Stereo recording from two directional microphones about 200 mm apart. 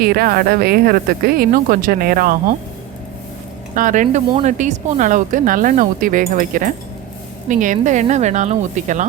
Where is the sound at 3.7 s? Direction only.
40° right (ahead or behind).